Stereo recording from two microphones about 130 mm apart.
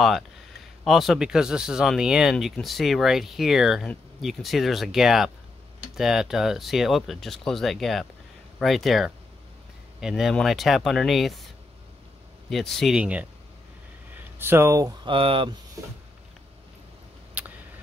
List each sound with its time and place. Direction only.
0.8 s speech: centre (ahead or behind)
12.4 s speech: centre (ahead or behind)
14.4 s speech: 20° right (ahead or behind)
15.0 s speech: 45° right (ahead or behind)
17.4 s a sound: 10° right (ahead or behind)